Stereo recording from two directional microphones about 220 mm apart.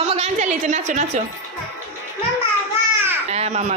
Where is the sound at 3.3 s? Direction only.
30° right (ahead or behind).